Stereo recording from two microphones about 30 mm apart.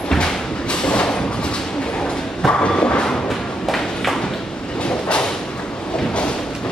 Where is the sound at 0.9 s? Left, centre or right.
Left.